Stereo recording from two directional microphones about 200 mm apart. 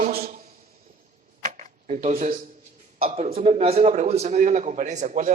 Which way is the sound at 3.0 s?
30° right (ahead or behind).